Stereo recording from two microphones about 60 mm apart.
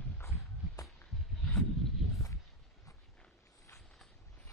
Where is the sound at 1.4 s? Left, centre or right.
Centre.